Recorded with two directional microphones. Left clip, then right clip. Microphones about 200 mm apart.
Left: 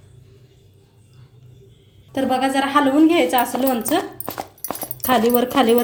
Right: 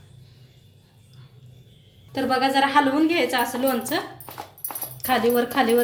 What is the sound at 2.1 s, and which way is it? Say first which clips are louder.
Speech: left 2 dB; 35° left (ahead or behind).